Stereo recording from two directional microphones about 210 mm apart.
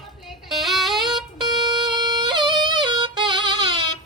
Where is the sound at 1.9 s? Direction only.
20° right (ahead or behind).